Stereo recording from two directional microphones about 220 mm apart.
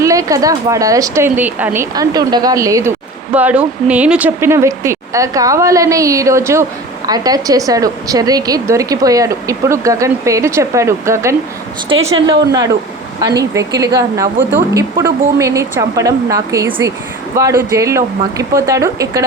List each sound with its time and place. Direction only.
0.0 s speech: 15° right (ahead or behind)